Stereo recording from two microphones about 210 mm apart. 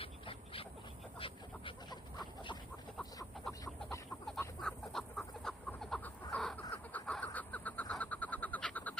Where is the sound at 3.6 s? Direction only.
15° left (ahead or behind).